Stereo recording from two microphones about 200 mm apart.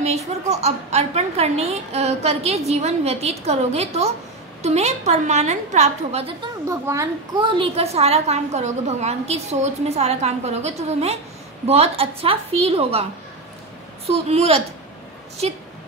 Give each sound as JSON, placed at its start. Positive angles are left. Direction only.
{"t": 0.5, "sound": "a woman's voice", "side_deg": -30}
{"t": 7.3, "sound": "a woman's voice", "side_deg": -25}
{"t": 14.0, "sound": "a woman's voice", "side_deg": -30}